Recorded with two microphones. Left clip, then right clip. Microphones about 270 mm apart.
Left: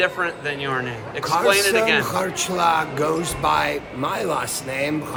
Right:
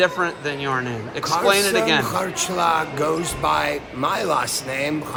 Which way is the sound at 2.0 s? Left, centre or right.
Centre.